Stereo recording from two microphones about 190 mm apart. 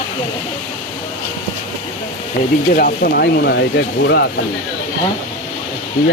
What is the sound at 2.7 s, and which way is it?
Speech, 50° left (ahead or behind).